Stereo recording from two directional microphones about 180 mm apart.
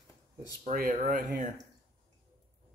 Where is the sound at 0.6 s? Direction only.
45° right (ahead or behind).